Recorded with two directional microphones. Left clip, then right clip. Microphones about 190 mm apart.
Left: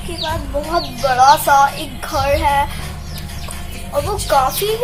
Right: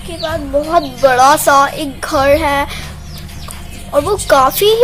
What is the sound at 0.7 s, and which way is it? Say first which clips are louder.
A woman's voice: right 6 dB; 50° right (ahead or behind).